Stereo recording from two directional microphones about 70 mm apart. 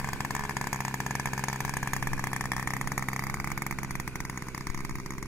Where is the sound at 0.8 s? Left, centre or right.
Left.